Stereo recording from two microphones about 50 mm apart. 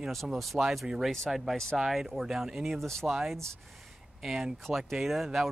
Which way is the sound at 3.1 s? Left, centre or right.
Centre.